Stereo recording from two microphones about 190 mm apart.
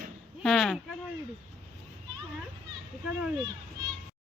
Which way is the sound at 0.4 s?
Centre (ahead or behind).